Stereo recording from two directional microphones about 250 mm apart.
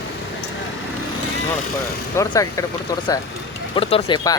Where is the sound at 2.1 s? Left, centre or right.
Centre.